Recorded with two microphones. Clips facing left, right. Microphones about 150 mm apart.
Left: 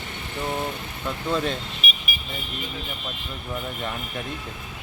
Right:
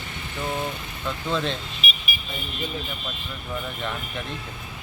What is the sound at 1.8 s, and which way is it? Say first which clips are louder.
Vehicle: right 3 dB; 55° left (ahead or behind).